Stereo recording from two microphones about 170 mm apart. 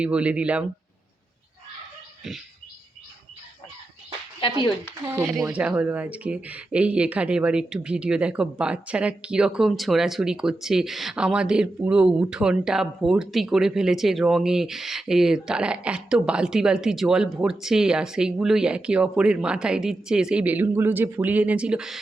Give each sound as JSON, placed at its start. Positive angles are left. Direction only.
{"t": 0.0, "sound": "speech", "side_deg": -5}
{"t": 4.4, "sound": "speech", "side_deg": 35}
{"t": 5.1, "sound": "speech", "side_deg": -15}